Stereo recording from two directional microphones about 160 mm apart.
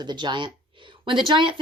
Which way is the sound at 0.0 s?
30° right (ahead or behind).